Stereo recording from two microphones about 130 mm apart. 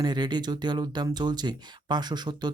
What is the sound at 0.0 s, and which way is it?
Speech, 35° right (ahead or behind).